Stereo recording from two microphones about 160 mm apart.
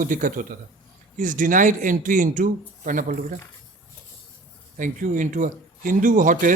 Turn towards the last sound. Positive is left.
turn(degrees=-55)  # may be behind; listen again after turning